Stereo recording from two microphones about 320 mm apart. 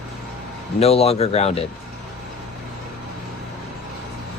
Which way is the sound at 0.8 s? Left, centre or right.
Centre.